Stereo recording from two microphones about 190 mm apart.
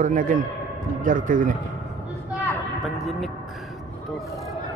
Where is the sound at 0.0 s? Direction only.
45° right (ahead or behind).